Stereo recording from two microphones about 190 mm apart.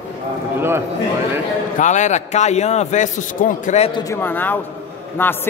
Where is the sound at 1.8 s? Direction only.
40° left (ahead or behind).